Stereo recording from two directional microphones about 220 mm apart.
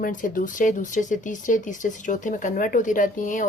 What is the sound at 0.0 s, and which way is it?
Speech, 35° left (ahead or behind).